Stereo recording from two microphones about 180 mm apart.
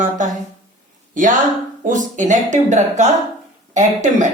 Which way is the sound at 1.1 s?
45° right (ahead or behind).